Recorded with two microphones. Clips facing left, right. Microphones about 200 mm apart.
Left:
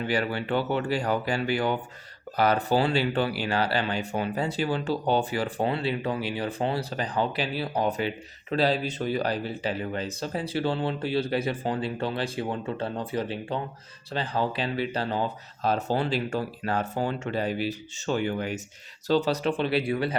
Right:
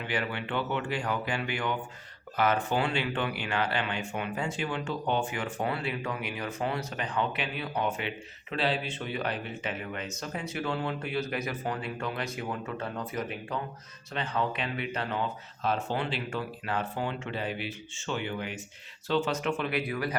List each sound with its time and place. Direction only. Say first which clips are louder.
0.0 s speech: left 5 dB; 40° left (ahead or behind)